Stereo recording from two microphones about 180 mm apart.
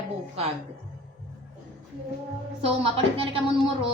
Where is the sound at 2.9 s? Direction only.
30° right (ahead or behind).